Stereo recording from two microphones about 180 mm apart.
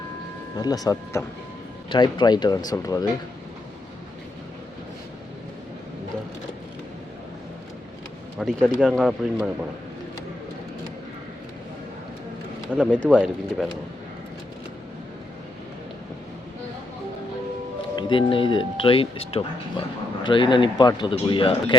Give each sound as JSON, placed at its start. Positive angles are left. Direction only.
{"t": 0.5, "sound": "speech", "side_deg": 20}
{"t": 8.4, "sound": "speech", "side_deg": 0}
{"t": 12.7, "sound": "speech", "side_deg": -10}
{"t": 17.9, "sound": "speech", "side_deg": 30}